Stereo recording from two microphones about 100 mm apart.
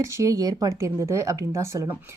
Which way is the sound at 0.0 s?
30° right (ahead or behind).